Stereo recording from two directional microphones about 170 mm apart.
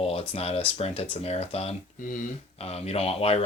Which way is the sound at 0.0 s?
35° left (ahead or behind).